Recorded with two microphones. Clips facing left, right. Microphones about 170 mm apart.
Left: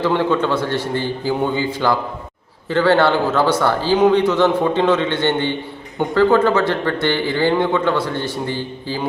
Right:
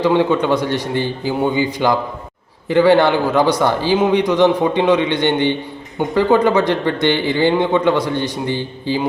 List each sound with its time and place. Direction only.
0.0 s a man's voice: 15° right (ahead or behind)